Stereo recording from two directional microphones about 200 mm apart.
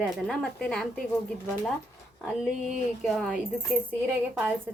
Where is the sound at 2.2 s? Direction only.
Centre (ahead or behind).